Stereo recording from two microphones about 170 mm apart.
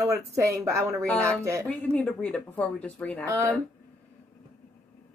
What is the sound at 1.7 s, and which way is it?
Speech, 5° left (ahead or behind).